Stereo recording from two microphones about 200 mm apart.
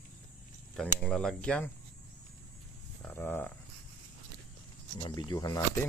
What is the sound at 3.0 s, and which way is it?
Speech, 10° left (ahead or behind).